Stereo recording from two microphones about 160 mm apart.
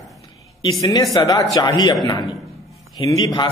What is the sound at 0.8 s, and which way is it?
A man's voice, 25° left (ahead or behind).